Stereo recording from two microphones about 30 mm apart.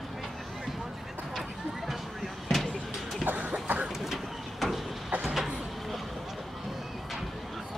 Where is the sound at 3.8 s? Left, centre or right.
Centre.